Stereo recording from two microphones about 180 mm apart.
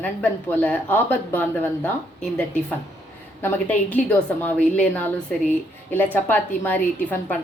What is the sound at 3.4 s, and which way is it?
A woman's voice, 10° left (ahead or behind).